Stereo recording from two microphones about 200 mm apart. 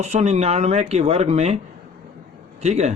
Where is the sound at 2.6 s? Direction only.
35° right (ahead or behind).